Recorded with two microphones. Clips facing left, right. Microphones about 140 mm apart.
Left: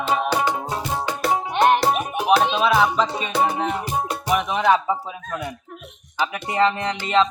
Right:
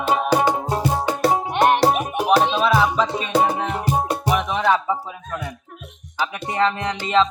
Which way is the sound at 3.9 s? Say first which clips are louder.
Right 4 dB; 40° right (ahead or behind).